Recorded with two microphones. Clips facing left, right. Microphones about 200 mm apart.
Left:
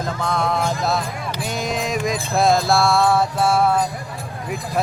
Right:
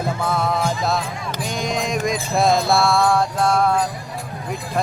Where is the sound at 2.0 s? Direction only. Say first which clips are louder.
Left 1 dB; centre (ahead or behind).